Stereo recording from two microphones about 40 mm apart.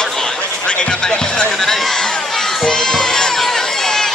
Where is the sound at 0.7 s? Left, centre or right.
Left.